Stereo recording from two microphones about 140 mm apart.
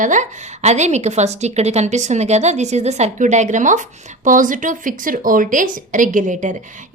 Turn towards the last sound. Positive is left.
turn(degrees=-60)  # may be behind; listen again after turning